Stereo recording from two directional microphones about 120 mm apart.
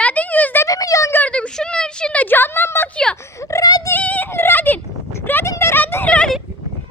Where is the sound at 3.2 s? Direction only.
25° left (ahead or behind).